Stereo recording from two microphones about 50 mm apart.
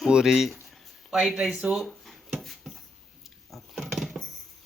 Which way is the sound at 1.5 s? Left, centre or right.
Right.